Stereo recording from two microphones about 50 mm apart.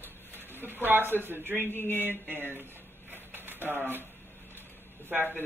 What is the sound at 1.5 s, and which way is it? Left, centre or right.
Speech, left.